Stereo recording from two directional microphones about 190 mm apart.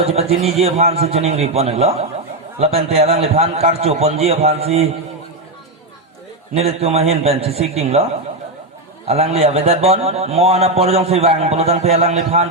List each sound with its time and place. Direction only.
0.0 s a man's voice: 35° right (ahead or behind)
6.5 s a man's voice: 30° right (ahead or behind)
9.0 s a man's voice: 35° right (ahead or behind)